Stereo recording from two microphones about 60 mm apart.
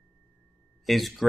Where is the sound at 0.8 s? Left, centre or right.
Centre.